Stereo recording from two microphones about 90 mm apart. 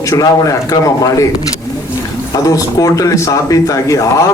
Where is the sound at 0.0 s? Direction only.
40° left (ahead or behind).